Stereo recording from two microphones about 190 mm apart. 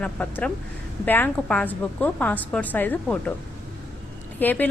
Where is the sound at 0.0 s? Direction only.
5° left (ahead or behind).